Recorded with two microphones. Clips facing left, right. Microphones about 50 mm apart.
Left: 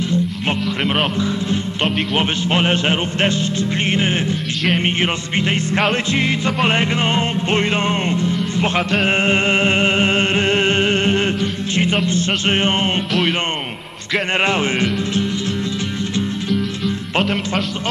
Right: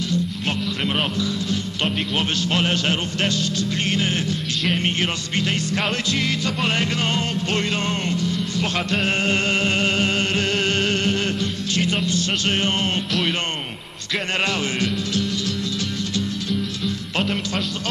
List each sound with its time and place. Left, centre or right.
0.1 s speech: left
4.7 s music: left
14.4 s music: left
16.4 s music: centre